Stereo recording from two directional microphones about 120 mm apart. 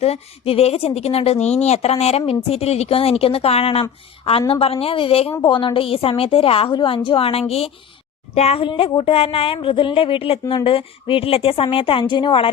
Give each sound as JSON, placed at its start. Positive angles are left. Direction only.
{"t": 0.0, "sound": "a woman's voice", "side_deg": 55}